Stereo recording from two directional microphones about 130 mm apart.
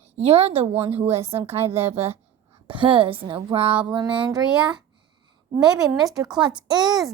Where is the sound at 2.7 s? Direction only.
40° right (ahead or behind).